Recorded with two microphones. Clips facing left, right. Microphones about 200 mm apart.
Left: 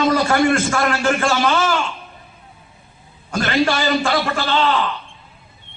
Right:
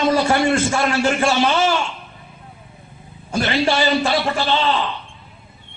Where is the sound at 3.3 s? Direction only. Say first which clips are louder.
Left 1 dB; 20° right (ahead or behind).